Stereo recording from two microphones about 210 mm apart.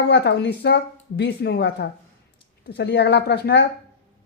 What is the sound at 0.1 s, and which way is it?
Speech, 55° left (ahead or behind).